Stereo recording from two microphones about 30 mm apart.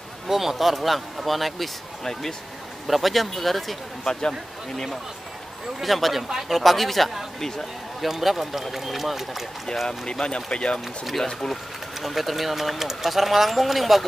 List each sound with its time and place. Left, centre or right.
0.3 s speech: centre
2.9 s speech: centre
4.0 s speech: centre
5.8 s speech: centre
7.3 s speech: centre
8.0 s speech: centre
10.2 s speech: left
12.0 s speech: centre